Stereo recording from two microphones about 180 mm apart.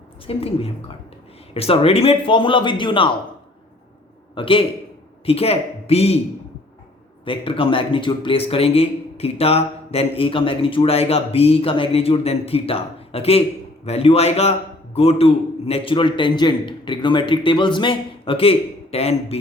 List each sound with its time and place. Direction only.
0.3 s a man's voice: 30° left (ahead or behind)
4.4 s a man's voice: 30° left (ahead or behind)
7.3 s a man's voice: 30° left (ahead or behind)